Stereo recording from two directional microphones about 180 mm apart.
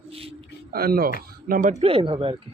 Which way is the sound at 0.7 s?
55° right (ahead or behind).